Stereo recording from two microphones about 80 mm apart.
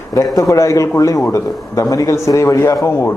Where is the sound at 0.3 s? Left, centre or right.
Left.